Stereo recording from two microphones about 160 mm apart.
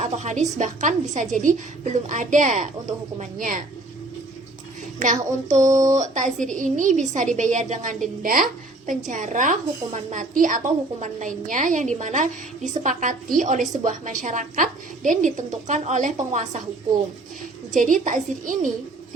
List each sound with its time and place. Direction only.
0.0 s a woman's voice: 45° right (ahead or behind)
4.9 s a woman's voice: 50° right (ahead or behind)
5.6 s speech: 20° right (ahead or behind)
6.0 s a woman's voice: 50° right (ahead or behind)
17.7 s a woman's voice: 55° right (ahead or behind)